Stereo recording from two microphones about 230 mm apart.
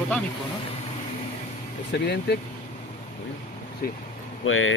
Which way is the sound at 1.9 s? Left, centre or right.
Left.